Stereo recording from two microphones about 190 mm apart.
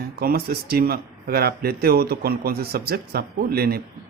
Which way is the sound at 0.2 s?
55° right (ahead or behind).